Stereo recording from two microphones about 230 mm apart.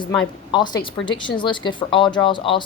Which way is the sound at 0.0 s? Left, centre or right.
Centre.